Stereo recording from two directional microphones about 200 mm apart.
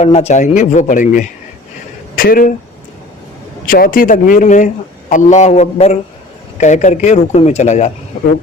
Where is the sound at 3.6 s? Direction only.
45° left (ahead or behind).